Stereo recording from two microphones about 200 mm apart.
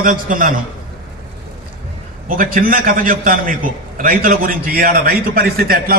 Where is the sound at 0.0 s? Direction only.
40° right (ahead or behind).